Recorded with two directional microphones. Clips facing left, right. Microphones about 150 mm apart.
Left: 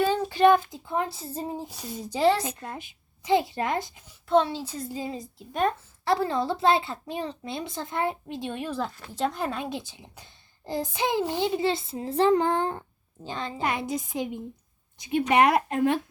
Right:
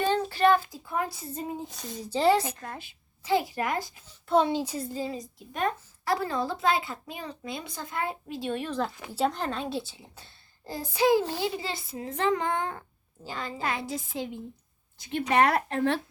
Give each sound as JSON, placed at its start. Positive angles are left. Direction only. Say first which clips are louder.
{"t": 0.0, "sound": "a child's voice", "louder": "left 3 dB", "side_deg": 10}
{"t": 1.6, "sound": "a woman's voice", "louder": "left 2 dB", "side_deg": 10}
{"t": 4.4, "sound": "speech", "louder": "right 5 dB", "side_deg": -15}
{"t": 4.9, "sound": "a woman's voice", "louder": "even", "side_deg": 15}
{"t": 9.0, "sound": "speech", "louder": "right 1 dB", "side_deg": -10}
{"t": 9.3, "sound": "a woman's voice", "louder": "left 1 dB", "side_deg": 10}